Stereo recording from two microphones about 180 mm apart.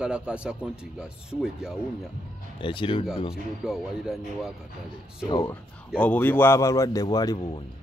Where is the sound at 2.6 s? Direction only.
30° left (ahead or behind).